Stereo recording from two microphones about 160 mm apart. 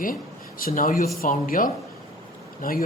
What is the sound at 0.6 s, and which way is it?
Speech, 60° left (ahead or behind).